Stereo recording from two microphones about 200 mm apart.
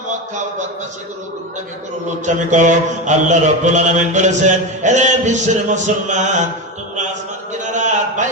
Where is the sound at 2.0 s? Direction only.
35° right (ahead or behind).